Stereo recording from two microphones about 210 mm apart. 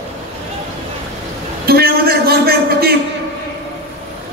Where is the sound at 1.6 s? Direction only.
45° right (ahead or behind).